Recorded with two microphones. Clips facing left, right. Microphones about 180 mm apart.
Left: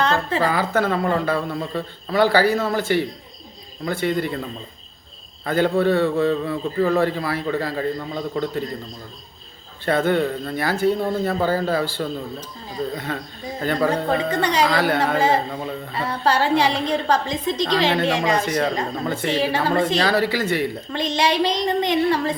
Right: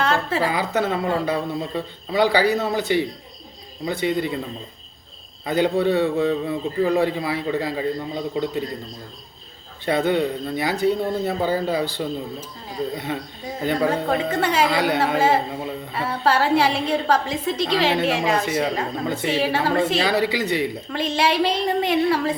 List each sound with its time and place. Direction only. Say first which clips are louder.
0.0 s a woman's voice: left 1 dB; 5° right (ahead or behind)
4.1 s a man's voice: even; 15° right (ahead or behind)
5.5 s a man's voice: left 1 dB; 15° right (ahead or behind)
9.8 s a man's voice: left 1 dB; 15° right (ahead or behind)
13.7 s a woman's voice: even; 5° right (ahead or behind)
14.7 s a man's voice: left 1 dB; 15° right (ahead or behind)
15.0 s a woman's voice: even; 5° right (ahead or behind)
20.1 s a man's voice: left 1 dB; 20° right (ahead or behind)
20.9 s a woman's voice: even; 5° right (ahead or behind)